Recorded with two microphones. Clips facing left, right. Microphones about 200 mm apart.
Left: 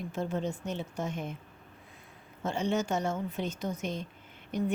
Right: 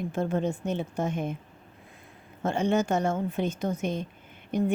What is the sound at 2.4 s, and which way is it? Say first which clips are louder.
A woman's voice: right 5 dB; 55° right (ahead or behind).